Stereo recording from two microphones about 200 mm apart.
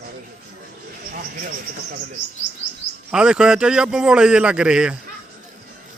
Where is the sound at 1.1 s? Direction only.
45° right (ahead or behind).